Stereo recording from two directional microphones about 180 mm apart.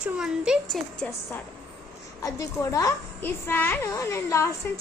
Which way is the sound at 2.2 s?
15° left (ahead or behind).